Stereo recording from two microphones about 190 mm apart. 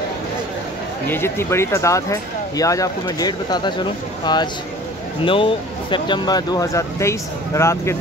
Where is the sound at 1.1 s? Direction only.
15° left (ahead or behind).